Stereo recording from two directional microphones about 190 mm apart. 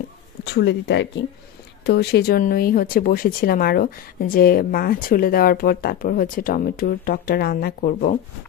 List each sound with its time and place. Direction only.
0.5 s speech: 65° left (ahead or behind); by 8.2 s 50° left (ahead or behind)